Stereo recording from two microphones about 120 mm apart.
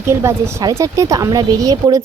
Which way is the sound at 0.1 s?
20° right (ahead or behind).